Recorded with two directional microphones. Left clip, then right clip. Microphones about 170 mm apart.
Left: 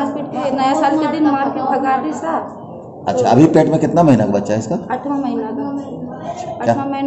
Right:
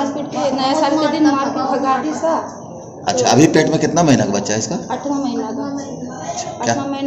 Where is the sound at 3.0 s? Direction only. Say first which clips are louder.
Left 1 dB; 55° left (ahead or behind).